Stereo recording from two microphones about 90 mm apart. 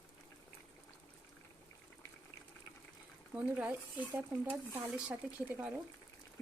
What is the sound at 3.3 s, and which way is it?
Speech, 15° right (ahead or behind).